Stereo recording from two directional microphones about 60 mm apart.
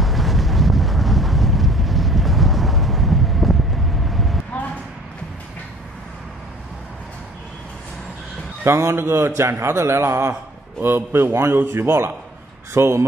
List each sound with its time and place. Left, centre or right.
0.0 s wind noise: centre
8.6 s a man's voice: right
10.8 s a man's voice: right